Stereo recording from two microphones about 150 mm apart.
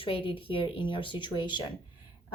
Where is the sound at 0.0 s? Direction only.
35° left (ahead or behind).